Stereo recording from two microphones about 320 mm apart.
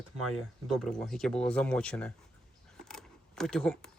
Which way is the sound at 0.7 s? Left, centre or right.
Centre.